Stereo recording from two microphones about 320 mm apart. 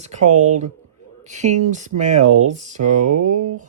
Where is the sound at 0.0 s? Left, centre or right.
Right.